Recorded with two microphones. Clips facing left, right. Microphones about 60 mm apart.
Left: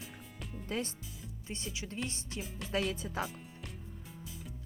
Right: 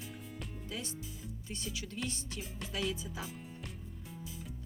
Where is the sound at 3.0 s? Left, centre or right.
Left.